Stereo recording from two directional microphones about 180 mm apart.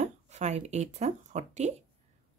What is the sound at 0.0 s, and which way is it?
Speech, 40° right (ahead or behind).